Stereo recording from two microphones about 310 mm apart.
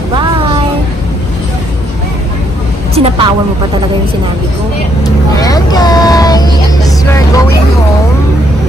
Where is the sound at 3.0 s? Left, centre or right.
Centre.